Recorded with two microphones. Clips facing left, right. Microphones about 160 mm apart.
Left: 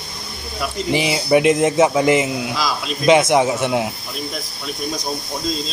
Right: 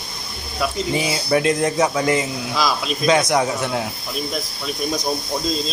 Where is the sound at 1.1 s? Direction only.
15° left (ahead or behind).